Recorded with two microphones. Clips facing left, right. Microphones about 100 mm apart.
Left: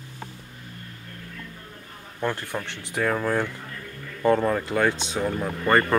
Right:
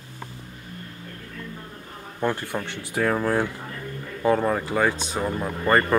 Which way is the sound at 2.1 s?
15° right (ahead or behind).